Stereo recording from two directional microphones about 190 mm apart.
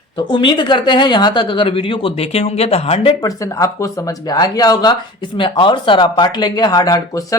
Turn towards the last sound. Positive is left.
turn(degrees=20)  # may be behind; listen again after turning